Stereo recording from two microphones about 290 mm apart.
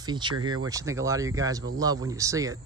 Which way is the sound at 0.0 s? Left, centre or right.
Centre.